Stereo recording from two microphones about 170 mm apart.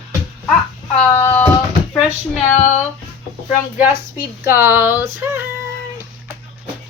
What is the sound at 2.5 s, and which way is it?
Speech, 40° left (ahead or behind).